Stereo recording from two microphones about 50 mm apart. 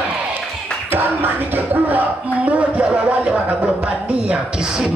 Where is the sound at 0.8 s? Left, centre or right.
Right.